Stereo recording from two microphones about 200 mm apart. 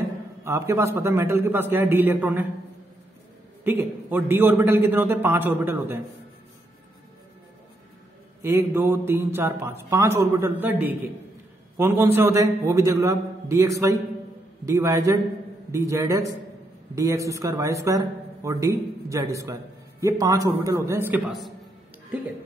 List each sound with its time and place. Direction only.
0.4 s speech: 15° right (ahead or behind)
3.6 s speech: 10° right (ahead or behind)
8.4 s speech: 10° right (ahead or behind)